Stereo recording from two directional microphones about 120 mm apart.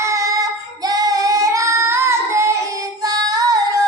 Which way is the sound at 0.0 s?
25° right (ahead or behind).